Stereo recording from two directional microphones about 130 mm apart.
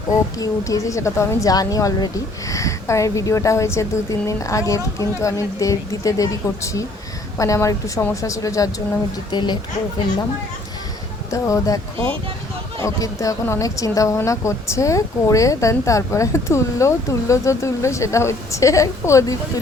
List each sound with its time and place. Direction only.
0.1 s a woman's voice: 25° left (ahead or behind)
11.3 s a woman's voice: 25° left (ahead or behind)
12.8 s a woman's voice: 25° left (ahead or behind)